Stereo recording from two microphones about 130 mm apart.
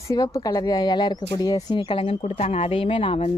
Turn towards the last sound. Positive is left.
turn(degrees=50)  # may be behind; listen again after turning